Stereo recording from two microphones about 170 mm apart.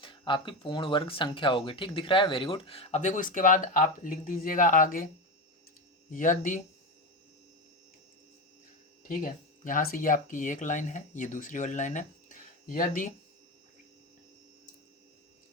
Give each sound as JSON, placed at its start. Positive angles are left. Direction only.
{"t": 0.0, "sound": "speech", "side_deg": 30}
{"t": 6.1, "sound": "speech", "side_deg": 50}
{"t": 9.0, "sound": "speech", "side_deg": 55}